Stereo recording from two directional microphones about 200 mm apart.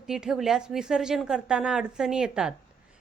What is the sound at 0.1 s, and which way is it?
A woman's voice, centre (ahead or behind).